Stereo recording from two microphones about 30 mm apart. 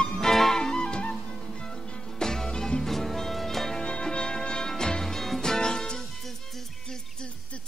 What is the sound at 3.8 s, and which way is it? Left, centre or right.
Music, left.